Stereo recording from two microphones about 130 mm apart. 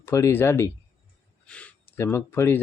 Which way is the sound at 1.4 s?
10° left (ahead or behind).